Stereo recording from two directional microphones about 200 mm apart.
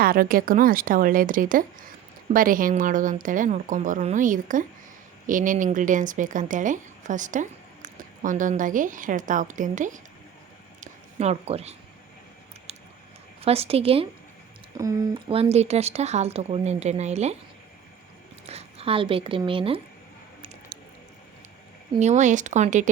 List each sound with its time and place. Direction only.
0.0 s speech: 45° right (ahead or behind)
10.8 s a sound: 35° right (ahead or behind)
13.4 s a woman's voice: 30° right (ahead or behind)
14.8 s speech: 15° right (ahead or behind)
15.3 s speech: 30° right (ahead or behind)
18.4 s speech: 30° right (ahead or behind)
21.9 s speech: 35° right (ahead or behind)